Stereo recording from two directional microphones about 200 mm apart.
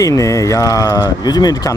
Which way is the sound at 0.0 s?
15° left (ahead or behind).